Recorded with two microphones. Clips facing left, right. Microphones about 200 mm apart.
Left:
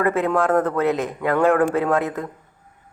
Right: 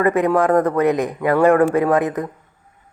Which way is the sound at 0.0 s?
15° right (ahead or behind).